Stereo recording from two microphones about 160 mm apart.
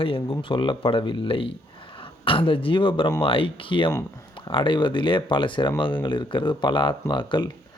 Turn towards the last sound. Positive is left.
turn(degrees=30)  # may be behind; listen again after turning